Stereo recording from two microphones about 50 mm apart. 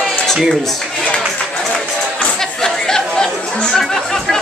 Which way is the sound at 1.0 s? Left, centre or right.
Centre.